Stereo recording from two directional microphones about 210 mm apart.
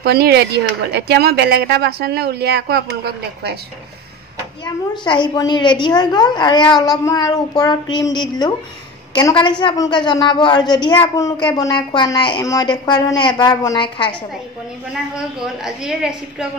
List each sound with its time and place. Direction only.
0.0 s speech: 50° right (ahead or behind)
5.0 s a woman's voice: 20° left (ahead or behind)
15.1 s a woman's voice: 5° right (ahead or behind)